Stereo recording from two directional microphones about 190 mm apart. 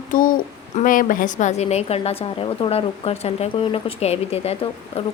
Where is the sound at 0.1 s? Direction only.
45° left (ahead or behind).